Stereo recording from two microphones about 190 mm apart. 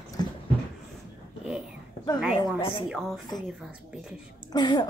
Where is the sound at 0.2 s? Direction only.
20° left (ahead or behind).